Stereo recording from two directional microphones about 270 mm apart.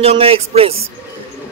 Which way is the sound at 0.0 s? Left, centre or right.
Right.